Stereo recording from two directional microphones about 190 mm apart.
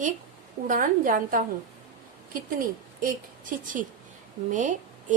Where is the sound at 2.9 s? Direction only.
45° right (ahead or behind).